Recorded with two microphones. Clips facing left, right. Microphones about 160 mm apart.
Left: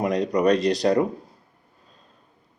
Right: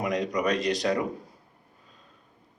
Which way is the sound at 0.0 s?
35° left (ahead or behind).